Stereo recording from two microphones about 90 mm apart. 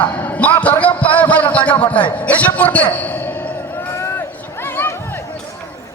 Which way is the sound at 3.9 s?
30° left (ahead or behind).